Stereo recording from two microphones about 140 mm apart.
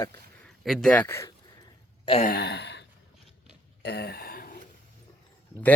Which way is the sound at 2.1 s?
40° left (ahead or behind).